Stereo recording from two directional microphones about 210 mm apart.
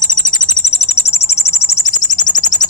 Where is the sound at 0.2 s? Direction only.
35° left (ahead or behind).